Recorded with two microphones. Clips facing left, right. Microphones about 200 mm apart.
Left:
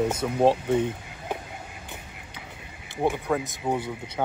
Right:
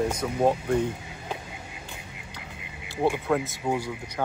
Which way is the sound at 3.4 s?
20° left (ahead or behind).